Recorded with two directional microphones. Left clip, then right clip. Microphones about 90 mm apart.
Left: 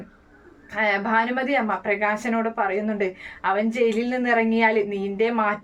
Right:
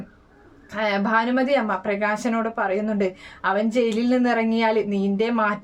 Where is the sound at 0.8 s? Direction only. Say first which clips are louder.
Even; 30° right (ahead or behind).